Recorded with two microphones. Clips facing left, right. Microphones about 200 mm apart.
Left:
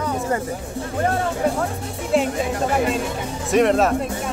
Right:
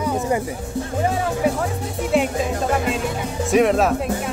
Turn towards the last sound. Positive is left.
turn(degrees=0)  # may be behind; listen again after turning